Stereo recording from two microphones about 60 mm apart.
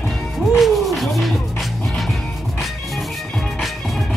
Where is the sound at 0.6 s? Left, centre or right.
Centre.